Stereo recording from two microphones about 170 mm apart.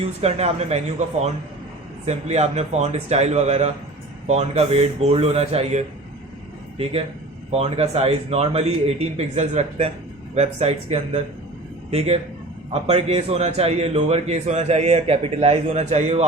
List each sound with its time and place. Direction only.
0.0 s a man's voice: 40° right (ahead or behind)
7.5 s a man's voice: 35° right (ahead or behind)